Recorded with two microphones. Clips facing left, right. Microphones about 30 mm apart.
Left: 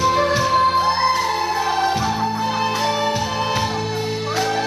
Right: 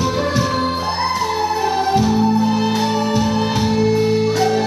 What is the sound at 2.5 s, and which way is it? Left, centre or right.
Music, centre.